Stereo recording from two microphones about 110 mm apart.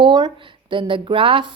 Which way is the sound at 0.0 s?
45° right (ahead or behind).